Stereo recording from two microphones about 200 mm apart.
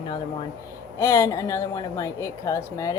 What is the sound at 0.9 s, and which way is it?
Speech, 15° left (ahead or behind).